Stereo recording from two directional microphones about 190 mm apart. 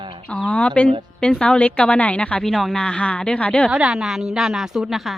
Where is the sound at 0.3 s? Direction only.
10° left (ahead or behind).